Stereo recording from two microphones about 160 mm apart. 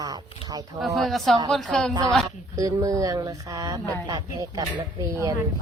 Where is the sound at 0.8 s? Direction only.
Centre (ahead or behind).